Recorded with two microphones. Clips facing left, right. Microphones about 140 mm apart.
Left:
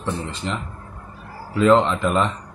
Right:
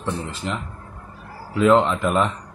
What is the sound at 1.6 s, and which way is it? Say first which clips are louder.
Speech: even; 5° right (ahead or behind).